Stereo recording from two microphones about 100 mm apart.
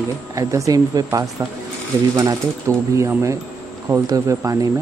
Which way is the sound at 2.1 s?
35° right (ahead or behind).